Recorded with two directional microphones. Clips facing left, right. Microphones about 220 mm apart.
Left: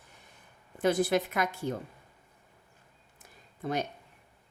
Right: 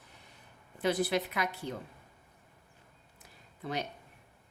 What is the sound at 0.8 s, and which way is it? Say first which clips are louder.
Speech: left 4 dB; 50° left (ahead or behind).